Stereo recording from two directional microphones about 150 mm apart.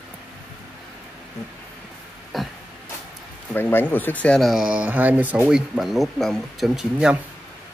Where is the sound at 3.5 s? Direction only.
15° left (ahead or behind); by 7.1 s 5° right (ahead or behind).